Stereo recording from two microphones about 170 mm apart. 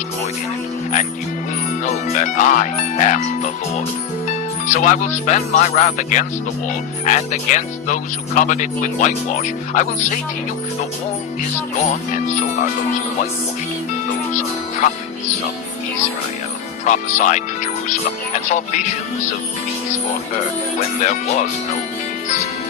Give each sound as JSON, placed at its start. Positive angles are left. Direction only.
{"t": 1.8, "sound": "speech", "side_deg": 45}
{"t": 11.9, "sound": "speech", "side_deg": 45}
{"t": 14.3, "sound": "speech", "side_deg": 45}
{"t": 16.8, "sound": "speech", "side_deg": 45}
{"t": 20.8, "sound": "speech", "side_deg": 45}